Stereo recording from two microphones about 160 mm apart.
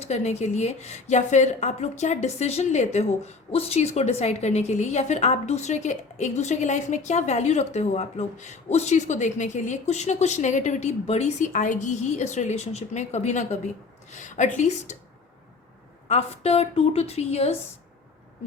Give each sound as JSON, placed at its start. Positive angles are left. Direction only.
{"t": 0.0, "sound": "a woman's voice", "side_deg": 45}
{"t": 16.0, "sound": "a woman's voice", "side_deg": 45}